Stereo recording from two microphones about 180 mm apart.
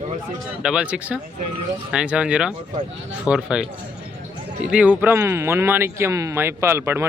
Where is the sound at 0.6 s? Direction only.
5° right (ahead or behind).